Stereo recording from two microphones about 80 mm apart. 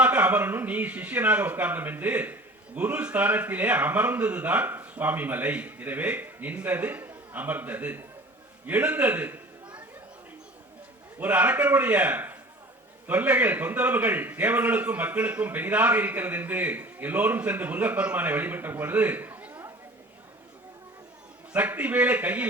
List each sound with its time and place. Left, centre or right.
0.0 s a man's voice: centre
11.2 s a man's voice: centre
21.5 s a man's voice: centre